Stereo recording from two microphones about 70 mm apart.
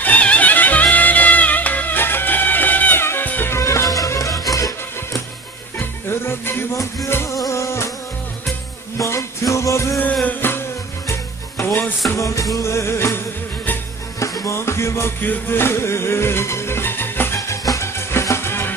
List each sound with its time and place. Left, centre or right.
0.0 s music: left
3.5 s music: left
5.8 s music: left
7.3 s a sound: left
8.9 s music: left
10.2 s music: left
11.1 s music: left
14.5 s music: left
17.5 s music: left